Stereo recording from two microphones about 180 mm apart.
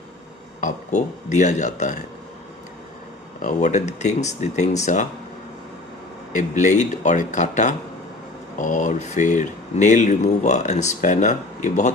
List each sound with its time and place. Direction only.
0.6 s speech: 45° left (ahead or behind)
3.4 s speech: 40° left (ahead or behind)
6.3 s speech: 45° left (ahead or behind)